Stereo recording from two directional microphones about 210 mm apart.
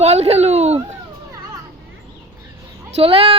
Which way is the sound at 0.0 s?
30° right (ahead or behind).